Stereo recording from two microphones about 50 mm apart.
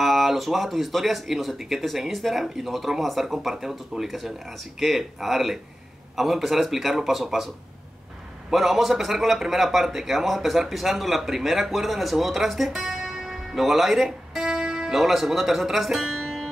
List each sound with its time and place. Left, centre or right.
0.0 s a man's voice: centre